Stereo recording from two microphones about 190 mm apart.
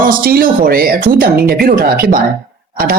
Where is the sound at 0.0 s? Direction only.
50° right (ahead or behind).